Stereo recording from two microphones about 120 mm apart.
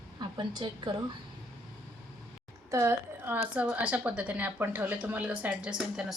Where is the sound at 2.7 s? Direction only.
20° right (ahead or behind).